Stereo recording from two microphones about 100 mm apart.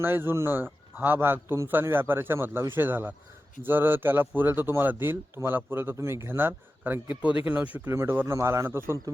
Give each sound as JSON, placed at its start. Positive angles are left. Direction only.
{"t": 0.0, "sound": "a man's voice", "side_deg": -20}